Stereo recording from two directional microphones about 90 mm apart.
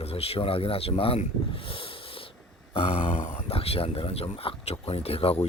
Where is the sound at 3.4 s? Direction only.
90° left.